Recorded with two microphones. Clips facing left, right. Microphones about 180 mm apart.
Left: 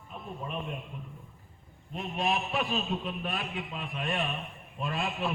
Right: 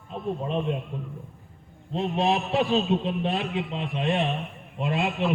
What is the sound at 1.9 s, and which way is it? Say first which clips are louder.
A man's voice: right 7 dB; 30° right (ahead or behind).